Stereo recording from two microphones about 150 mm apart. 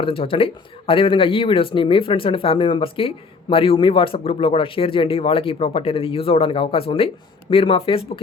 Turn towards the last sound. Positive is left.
turn(degrees=35)  # may be behind; listen again after turning